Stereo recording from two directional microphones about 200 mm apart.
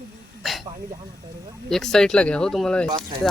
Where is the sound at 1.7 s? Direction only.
Centre (ahead or behind).